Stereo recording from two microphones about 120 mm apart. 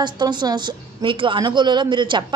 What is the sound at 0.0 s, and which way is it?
A woman's voice, 40° right (ahead or behind).